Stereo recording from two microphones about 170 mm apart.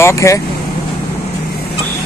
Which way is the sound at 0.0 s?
15° left (ahead or behind).